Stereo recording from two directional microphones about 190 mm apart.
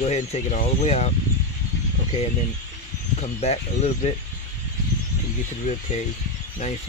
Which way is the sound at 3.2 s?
35° left (ahead or behind).